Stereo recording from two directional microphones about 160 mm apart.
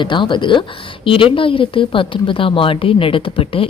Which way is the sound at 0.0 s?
30° left (ahead or behind).